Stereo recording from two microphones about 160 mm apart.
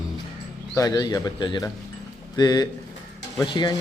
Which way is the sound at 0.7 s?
20° left (ahead or behind).